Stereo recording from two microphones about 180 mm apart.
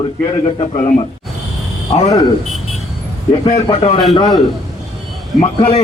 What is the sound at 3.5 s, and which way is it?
Speech, 35° left (ahead or behind).